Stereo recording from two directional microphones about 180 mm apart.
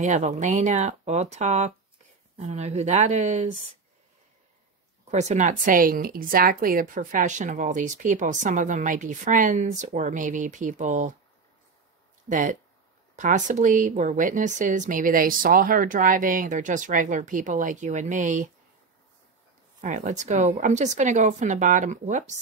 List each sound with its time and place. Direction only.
0.0 s speech: 40° right (ahead or behind)
5.0 s speech: 40° right (ahead or behind)
12.3 s speech: 45° right (ahead or behind)
19.8 s speech: 45° right (ahead or behind)